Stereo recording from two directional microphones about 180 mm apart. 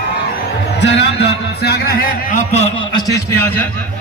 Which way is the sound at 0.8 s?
70° left (ahead or behind).